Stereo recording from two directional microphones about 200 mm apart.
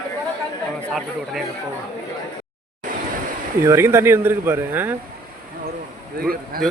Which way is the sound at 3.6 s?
15° right (ahead or behind).